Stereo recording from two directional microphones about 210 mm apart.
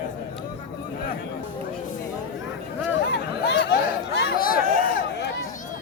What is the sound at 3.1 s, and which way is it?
Chatter, 55° left (ahead or behind).